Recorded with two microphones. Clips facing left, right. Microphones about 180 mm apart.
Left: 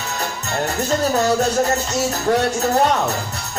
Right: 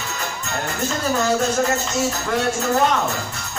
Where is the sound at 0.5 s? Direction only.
40° left (ahead or behind).